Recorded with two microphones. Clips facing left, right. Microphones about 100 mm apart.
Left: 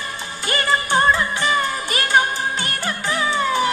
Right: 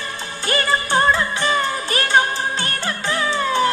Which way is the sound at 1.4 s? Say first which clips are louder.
Even; 30° right (ahead or behind).